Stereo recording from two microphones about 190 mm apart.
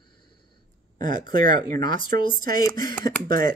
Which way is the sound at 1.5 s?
25° left (ahead or behind).